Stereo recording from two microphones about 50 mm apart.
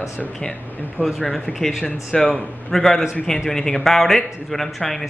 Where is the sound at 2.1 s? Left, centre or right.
Centre.